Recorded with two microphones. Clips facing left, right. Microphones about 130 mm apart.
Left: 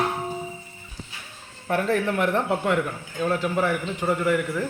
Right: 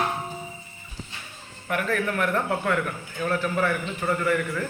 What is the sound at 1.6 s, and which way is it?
A man's voice, 30° left (ahead or behind).